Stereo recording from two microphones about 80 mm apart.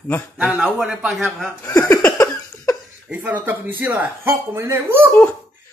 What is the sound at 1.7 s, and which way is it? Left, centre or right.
Speech, left.